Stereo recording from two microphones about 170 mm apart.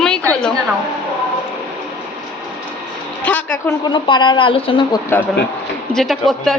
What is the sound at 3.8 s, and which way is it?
A woman's voice, 25° left (ahead or behind).